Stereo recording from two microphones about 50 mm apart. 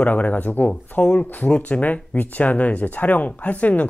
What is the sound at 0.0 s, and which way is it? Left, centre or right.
Speech, left.